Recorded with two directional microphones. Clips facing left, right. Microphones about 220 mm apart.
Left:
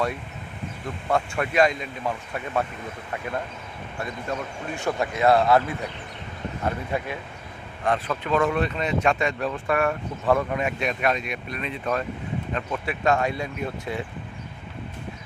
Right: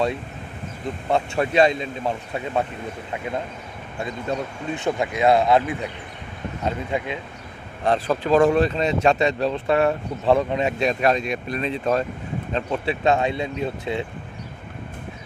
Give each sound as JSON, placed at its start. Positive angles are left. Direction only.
{"t": 1.1, "sound": "speech", "side_deg": -25}
{"t": 4.0, "sound": "speech", "side_deg": -20}
{"t": 7.9, "sound": "speech", "side_deg": -35}